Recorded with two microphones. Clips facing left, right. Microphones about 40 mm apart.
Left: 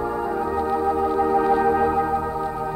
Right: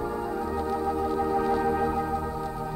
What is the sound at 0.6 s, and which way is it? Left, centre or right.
Organ, left.